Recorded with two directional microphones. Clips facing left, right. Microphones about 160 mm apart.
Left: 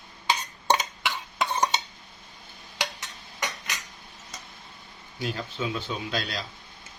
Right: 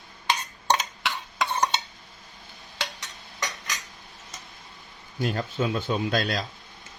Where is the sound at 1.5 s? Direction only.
10° left (ahead or behind).